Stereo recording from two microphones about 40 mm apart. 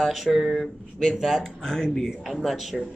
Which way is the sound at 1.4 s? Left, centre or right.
Centre.